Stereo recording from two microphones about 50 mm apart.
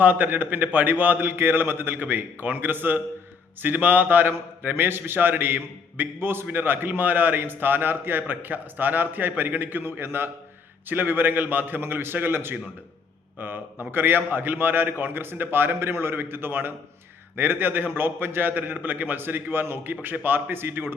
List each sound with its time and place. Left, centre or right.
0.0 s a man's voice: right
4.7 s a man's voice: right